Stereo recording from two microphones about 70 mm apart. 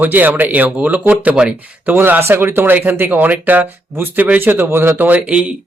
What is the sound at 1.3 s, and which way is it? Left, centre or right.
Speech, centre.